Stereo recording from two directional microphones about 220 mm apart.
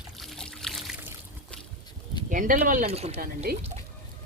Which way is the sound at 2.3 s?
35° right (ahead or behind).